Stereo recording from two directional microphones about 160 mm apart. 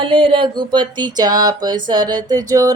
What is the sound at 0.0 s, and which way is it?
A woman's voice, 35° right (ahead or behind).